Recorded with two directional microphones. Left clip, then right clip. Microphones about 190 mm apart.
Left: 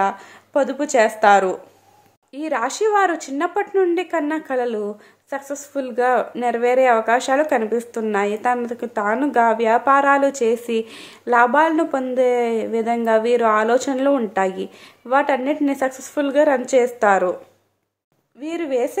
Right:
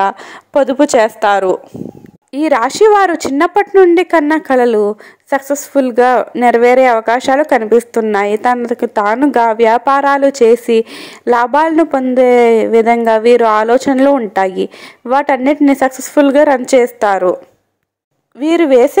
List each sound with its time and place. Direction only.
0.0 s speech: 40° right (ahead or behind)
18.4 s speech: 45° right (ahead or behind)